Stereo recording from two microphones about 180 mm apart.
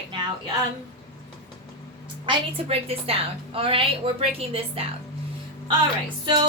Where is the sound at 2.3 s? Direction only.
30° right (ahead or behind).